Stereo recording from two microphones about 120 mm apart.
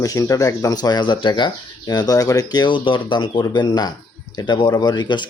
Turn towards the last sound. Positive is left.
turn(degrees=40)  # may be behind; listen again after turning